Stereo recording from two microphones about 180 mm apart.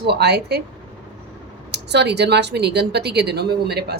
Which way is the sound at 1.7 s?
70° right (ahead or behind).